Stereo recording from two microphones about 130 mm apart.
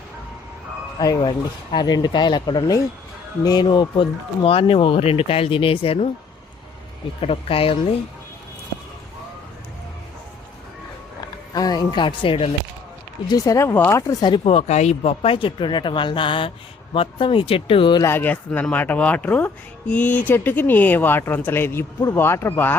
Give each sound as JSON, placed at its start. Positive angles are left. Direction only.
{"t": 0.9, "sound": "speech", "side_deg": 30}
{"t": 7.2, "sound": "speech", "side_deg": 45}
{"t": 11.5, "sound": "a woman's voice", "side_deg": 30}
{"t": 13.3, "sound": "speech", "side_deg": 25}
{"t": 18.0, "sound": "speech", "side_deg": 15}